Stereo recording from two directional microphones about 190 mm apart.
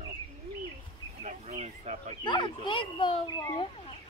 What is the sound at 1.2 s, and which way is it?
Speech, 40° right (ahead or behind).